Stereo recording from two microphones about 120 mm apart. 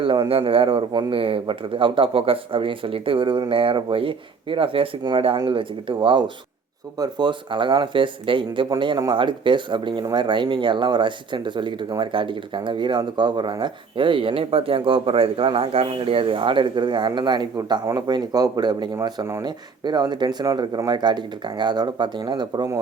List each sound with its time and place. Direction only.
0.0 s speech: 45° right (ahead or behind)